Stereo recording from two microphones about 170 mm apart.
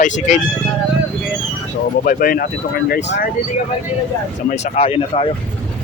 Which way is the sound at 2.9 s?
90° left.